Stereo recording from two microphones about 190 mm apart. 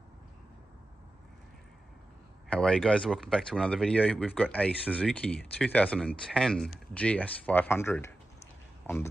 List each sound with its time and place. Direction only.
2.5 s speech: 5° left (ahead or behind)